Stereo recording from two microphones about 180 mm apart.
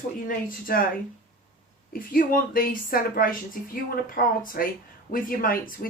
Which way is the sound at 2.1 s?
50° left (ahead or behind).